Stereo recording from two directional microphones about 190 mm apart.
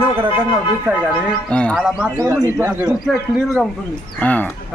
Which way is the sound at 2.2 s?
15° right (ahead or behind).